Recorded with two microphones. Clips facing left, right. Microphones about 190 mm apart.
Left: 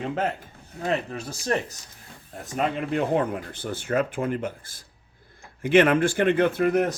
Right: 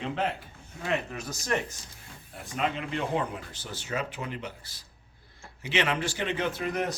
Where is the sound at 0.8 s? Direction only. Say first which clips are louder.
Left 4 dB; 35° left (ahead or behind).